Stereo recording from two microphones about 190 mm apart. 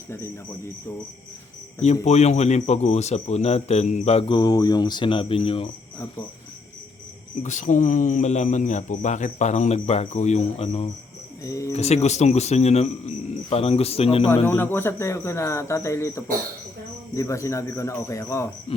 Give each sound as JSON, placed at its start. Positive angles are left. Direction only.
{"t": 1.8, "sound": "speech", "side_deg": 35}
{"t": 7.4, "sound": "speech", "side_deg": 40}
{"t": 11.4, "sound": "speech", "side_deg": 15}
{"t": 11.7, "sound": "speech", "side_deg": 35}
{"t": 14.4, "sound": "speech", "side_deg": 10}